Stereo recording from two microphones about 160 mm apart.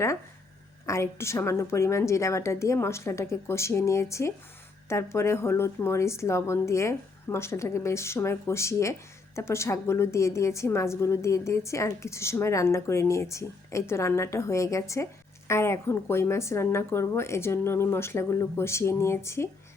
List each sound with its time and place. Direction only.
0.9 s a woman's voice: 15° left (ahead or behind)